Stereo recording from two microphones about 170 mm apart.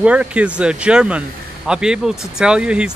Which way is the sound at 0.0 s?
5° right (ahead or behind).